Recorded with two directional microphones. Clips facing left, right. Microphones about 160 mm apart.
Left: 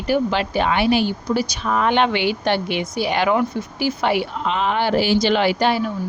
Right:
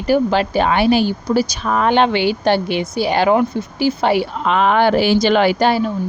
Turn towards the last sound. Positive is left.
turn(degrees=-45)  # may be behind; listen again after turning